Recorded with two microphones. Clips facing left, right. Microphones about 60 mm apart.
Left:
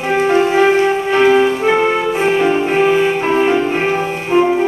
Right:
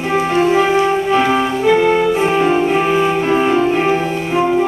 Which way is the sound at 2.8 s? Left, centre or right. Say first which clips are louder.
Left 1 dB; centre.